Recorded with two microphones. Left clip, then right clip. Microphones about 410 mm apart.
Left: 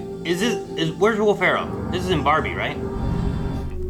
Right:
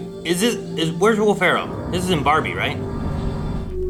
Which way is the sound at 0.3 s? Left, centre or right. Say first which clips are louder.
Right 2 dB; left.